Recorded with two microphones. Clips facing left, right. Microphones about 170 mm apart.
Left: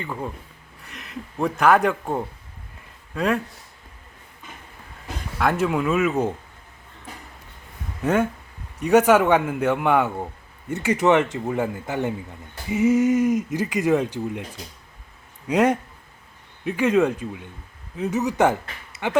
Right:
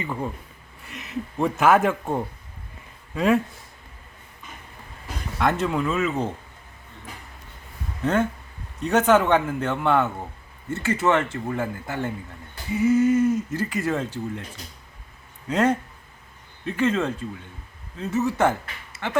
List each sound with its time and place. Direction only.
0.0 s speech: 5° right (ahead or behind)
5.4 s speech: 5° left (ahead or behind)
8.0 s speech: 10° left (ahead or behind)
15.4 s speech: 15° left (ahead or behind)